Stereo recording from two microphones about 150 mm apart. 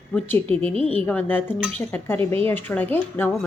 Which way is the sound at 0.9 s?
10° left (ahead or behind).